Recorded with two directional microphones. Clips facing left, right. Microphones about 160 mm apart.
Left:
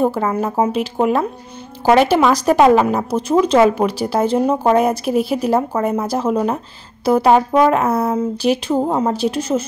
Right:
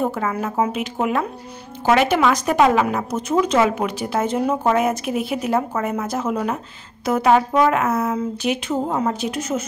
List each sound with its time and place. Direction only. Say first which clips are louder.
0.0 s speech: left 5 dB; 30° left (ahead or behind)